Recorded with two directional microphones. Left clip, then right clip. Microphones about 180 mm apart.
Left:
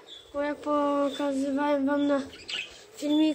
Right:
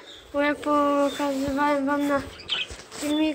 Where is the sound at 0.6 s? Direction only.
5° left (ahead or behind).